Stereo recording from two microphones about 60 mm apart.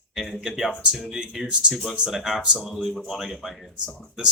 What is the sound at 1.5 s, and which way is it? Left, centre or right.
Speech, centre.